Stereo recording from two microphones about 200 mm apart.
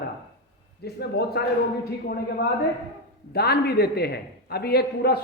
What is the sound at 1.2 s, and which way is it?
A man's voice, 50° left (ahead or behind).